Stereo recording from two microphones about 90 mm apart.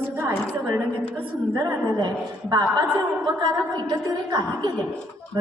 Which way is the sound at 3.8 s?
45° right (ahead or behind).